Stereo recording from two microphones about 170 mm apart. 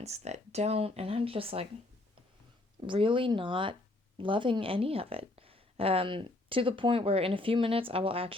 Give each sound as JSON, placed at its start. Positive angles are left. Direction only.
{"t": 0.0, "sound": "speech", "side_deg": -40}
{"t": 2.8, "sound": "speech", "side_deg": -30}